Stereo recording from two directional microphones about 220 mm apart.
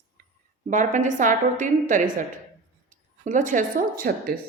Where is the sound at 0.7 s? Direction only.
35° right (ahead or behind).